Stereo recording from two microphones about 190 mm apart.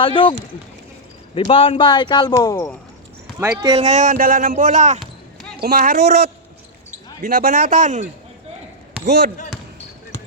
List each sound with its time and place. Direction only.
0.0 s speech: 25° left (ahead or behind)
1.5 s speech: 30° left (ahead or behind)
3.4 s speech: 15° right (ahead or behind)
3.8 s speech: 40° right (ahead or behind)
7.2 s speech: 50° right (ahead or behind)
9.0 s speech: 60° right (ahead or behind)